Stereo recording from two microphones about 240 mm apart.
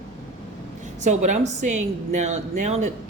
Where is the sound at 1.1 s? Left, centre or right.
Right.